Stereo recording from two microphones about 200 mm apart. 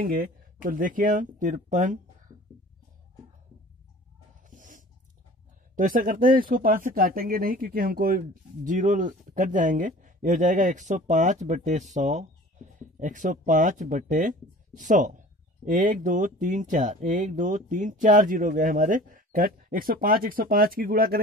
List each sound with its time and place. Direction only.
0.0 s speech: 45° right (ahead or behind)
4.5 s a sound: 40° right (ahead or behind)
5.8 s speech: 45° right (ahead or behind)